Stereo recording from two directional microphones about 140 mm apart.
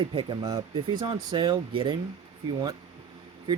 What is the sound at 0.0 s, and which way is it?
Speech, 35° right (ahead or behind).